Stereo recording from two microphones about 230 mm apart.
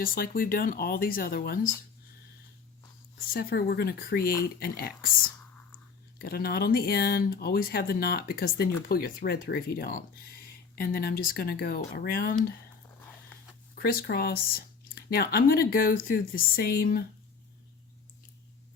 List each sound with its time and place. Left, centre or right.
0.0 s speech: left
3.3 s speech: left
6.1 s speech: left
13.7 s speech: left